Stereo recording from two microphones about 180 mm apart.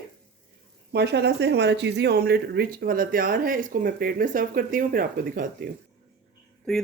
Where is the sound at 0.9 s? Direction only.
65° right (ahead or behind); by 5.5 s 50° right (ahead or behind).